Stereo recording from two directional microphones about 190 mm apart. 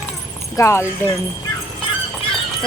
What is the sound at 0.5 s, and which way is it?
Speech, 15° left (ahead or behind).